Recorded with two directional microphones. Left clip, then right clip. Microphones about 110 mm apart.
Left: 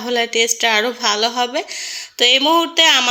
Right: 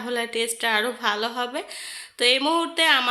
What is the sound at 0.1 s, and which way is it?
Speech, 25° left (ahead or behind).